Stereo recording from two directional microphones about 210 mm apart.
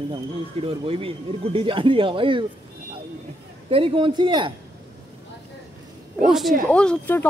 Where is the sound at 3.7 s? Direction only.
25° right (ahead or behind).